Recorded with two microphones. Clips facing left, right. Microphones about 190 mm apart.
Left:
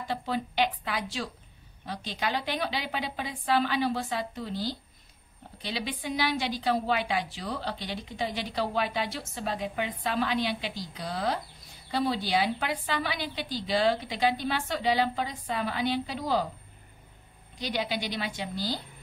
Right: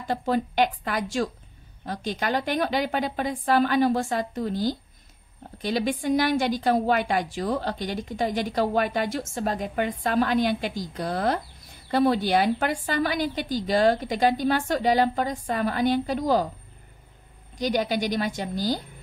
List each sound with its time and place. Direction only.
0.1 s a woman's voice: 50° right (ahead or behind)
17.6 s a woman's voice: 45° right (ahead or behind)